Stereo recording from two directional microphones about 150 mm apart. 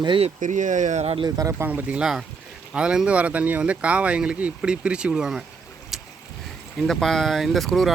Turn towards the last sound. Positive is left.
turn(degrees=0)  # may be behind; listen again after turning